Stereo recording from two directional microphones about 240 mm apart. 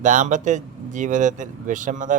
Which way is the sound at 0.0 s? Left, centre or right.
Right.